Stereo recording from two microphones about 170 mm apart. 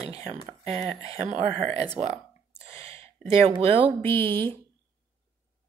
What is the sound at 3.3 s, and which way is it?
Speech, 35° right (ahead or behind).